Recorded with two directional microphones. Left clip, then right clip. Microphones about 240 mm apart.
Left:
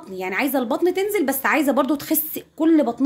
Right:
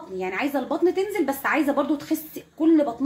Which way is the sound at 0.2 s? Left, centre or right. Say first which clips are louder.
Left 4 dB; left.